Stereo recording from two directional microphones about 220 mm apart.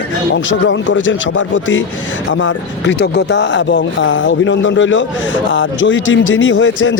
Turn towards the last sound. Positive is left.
turn(degrees=60)  # may be behind; listen again after turning